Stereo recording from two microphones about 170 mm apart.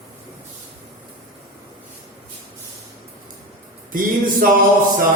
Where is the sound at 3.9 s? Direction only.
55° right (ahead or behind).